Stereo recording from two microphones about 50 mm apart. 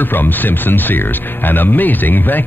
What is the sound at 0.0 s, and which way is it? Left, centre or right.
Speech, left.